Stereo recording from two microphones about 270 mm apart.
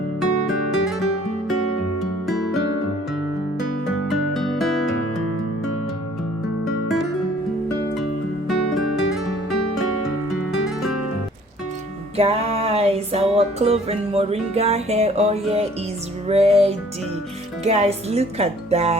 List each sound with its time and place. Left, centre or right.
0.2 s music: centre
2.2 s music: centre
4.1 s music: centre
12.1 s music: right
16.3 s speech: right